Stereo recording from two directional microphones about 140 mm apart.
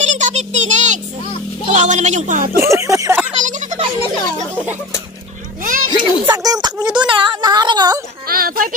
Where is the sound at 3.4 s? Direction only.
60° right (ahead or behind).